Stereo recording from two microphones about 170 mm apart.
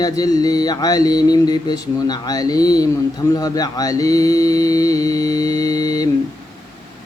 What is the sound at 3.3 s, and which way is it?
Mantra, 20° left (ahead or behind).